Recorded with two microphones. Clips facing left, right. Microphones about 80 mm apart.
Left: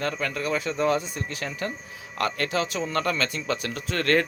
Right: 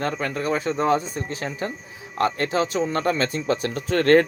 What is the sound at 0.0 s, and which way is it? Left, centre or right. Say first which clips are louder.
A man's voice: right 3 dB; right.